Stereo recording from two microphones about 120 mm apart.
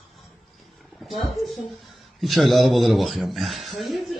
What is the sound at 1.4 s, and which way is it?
A man's voice, centre (ahead or behind).